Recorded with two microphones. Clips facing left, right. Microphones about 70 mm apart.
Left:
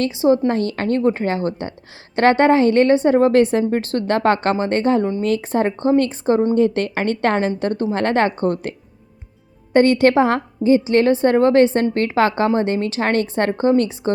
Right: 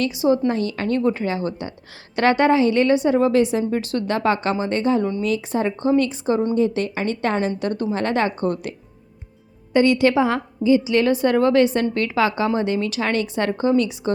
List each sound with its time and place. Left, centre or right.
0.0 s a woman's voice: left
7.9 s a woman's voice: left
9.7 s a woman's voice: left